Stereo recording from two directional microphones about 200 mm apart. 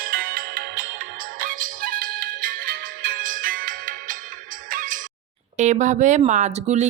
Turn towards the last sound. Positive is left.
turn(degrees=-35)  # may be behind; listen again after turning